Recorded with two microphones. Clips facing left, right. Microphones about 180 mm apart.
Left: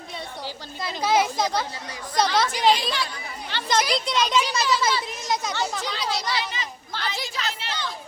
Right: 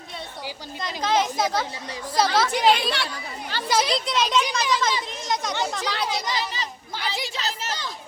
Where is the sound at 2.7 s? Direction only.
65° right (ahead or behind).